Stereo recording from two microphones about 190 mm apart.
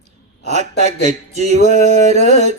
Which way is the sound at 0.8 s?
35° right (ahead or behind).